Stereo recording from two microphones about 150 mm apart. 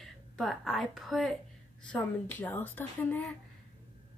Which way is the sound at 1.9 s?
10° left (ahead or behind).